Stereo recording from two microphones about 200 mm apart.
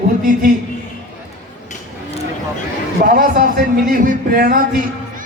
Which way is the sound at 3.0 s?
45° right (ahead or behind).